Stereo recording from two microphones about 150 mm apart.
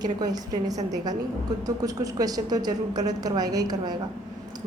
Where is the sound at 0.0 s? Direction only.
25° right (ahead or behind).